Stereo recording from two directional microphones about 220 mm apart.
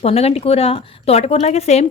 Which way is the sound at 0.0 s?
25° left (ahead or behind).